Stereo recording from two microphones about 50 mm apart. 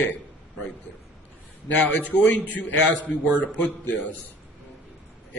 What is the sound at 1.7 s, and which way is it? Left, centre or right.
A man's voice, left.